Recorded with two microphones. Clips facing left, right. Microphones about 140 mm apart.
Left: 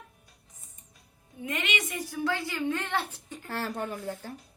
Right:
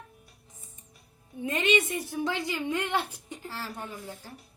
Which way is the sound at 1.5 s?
30° right (ahead or behind).